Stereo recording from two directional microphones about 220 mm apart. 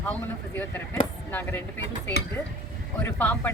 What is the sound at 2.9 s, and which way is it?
Speech, 10° left (ahead or behind).